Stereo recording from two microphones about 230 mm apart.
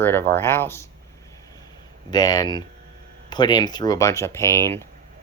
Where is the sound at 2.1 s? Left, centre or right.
Centre.